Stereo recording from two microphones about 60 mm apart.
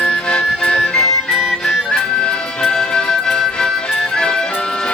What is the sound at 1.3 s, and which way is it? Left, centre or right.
Music, centre.